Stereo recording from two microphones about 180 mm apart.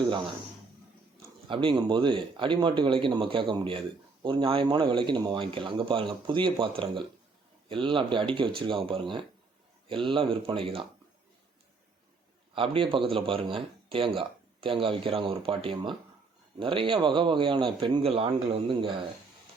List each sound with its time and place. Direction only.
1.5 s speech: 30° right (ahead or behind)
12.5 s speech: 30° right (ahead or behind)